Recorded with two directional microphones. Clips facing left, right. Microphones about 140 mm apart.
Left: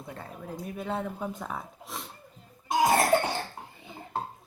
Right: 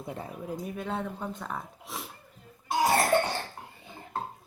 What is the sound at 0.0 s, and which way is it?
Speech, 20° right (ahead or behind).